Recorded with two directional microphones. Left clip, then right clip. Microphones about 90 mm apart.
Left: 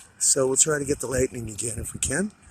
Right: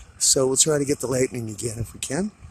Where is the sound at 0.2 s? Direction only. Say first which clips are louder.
Right 3 dB; 30° right (ahead or behind).